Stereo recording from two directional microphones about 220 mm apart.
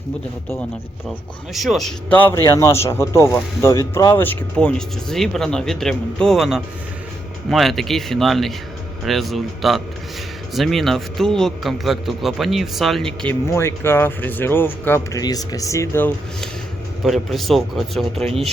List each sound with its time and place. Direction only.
1.5 s speech: centre (ahead or behind)